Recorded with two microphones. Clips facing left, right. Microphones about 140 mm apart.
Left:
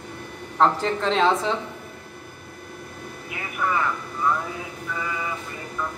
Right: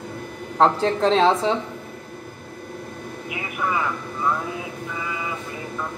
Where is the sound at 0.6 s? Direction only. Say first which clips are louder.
Right 3 dB; 30° right (ahead or behind).